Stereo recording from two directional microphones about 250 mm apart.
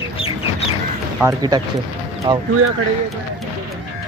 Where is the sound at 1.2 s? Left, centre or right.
Centre.